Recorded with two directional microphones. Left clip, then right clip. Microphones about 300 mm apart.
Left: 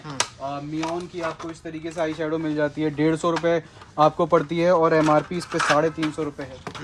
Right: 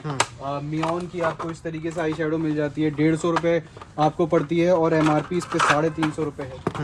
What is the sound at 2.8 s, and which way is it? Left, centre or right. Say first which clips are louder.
Speech: right 1 dB; centre.